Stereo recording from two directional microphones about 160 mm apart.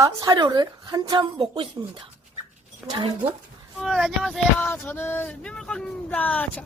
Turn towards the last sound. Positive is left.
turn(degrees=10)  # may be behind; listen again after turning